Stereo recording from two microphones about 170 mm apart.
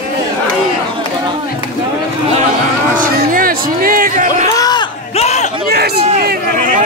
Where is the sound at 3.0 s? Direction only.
55° right (ahead or behind).